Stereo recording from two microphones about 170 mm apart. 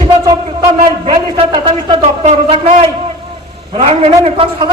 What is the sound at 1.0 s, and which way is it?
A man's voice, 30° right (ahead or behind).